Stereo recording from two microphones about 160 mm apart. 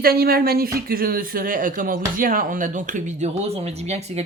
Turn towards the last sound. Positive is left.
turn(degrees=-45)  # may be behind; listen again after turning